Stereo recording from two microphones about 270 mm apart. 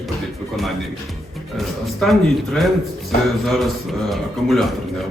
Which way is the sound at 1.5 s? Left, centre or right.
Centre.